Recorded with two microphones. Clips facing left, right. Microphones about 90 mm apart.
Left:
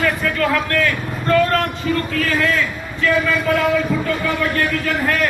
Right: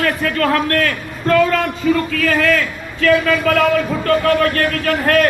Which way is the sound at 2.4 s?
90° right.